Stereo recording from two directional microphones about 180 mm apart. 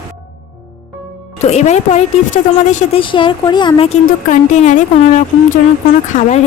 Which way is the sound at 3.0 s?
25° left (ahead or behind).